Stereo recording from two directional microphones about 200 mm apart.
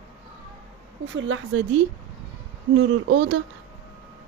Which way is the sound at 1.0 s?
70° right (ahead or behind).